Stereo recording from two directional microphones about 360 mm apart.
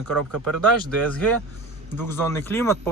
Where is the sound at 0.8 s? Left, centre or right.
Centre.